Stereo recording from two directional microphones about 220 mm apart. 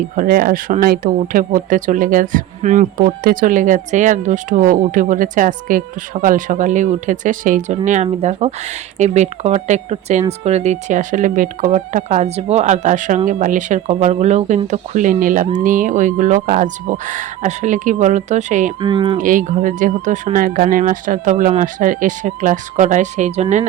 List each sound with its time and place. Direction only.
0.2 s speech: 40° right (ahead or behind)
18.8 s speech: 20° right (ahead or behind)
19.2 s speech: 35° right (ahead or behind)